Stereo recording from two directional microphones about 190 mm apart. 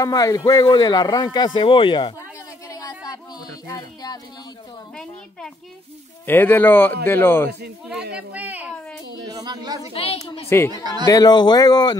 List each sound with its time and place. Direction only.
0.0 s speech: 20° left (ahead or behind)
2.7 s a sound: 20° left (ahead or behind)
6.2 s speech: 10° left (ahead or behind)
8.3 s speech: 10° right (ahead or behind)
9.3 s speech: 20° right (ahead or behind)
9.9 s speech: 30° left (ahead or behind)
10.7 s speech: 20° right (ahead or behind)
11.1 s speech: 20° left (ahead or behind)